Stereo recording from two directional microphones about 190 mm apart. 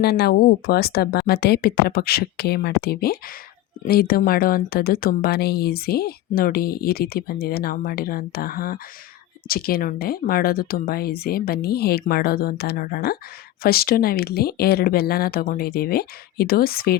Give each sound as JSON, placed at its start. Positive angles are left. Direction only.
{"t": 0.0, "sound": "speech", "side_deg": 55}